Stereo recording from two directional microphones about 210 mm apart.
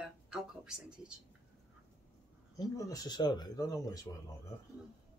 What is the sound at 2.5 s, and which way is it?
Speech, 15° left (ahead or behind).